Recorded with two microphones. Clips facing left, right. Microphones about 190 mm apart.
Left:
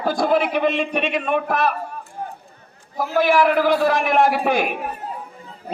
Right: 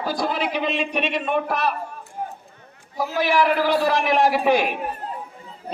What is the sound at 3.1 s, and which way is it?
A man's voice, 50° left (ahead or behind).